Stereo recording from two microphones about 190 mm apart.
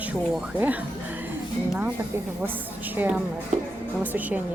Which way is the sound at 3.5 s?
40° right (ahead or behind).